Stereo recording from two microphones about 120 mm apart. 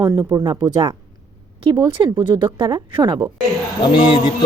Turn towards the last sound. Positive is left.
turn(degrees=40)  # may be behind; listen again after turning